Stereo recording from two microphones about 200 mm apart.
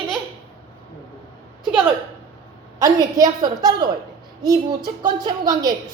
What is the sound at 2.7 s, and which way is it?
A woman's voice, 20° right (ahead or behind).